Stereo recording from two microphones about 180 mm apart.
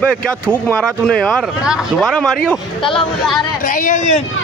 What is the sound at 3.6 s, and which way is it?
Speech, 50° left (ahead or behind).